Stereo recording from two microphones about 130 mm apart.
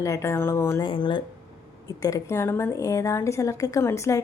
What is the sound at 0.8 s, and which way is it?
Speech, 35° left (ahead or behind).